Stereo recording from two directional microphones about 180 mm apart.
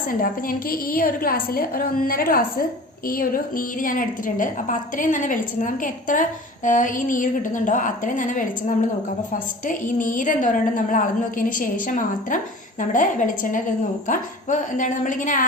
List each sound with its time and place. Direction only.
0.1 s a woman's voice: 50° left (ahead or behind)